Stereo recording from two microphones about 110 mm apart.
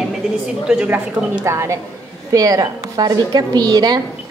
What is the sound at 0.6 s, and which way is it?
A woman's voice, 15° right (ahead or behind).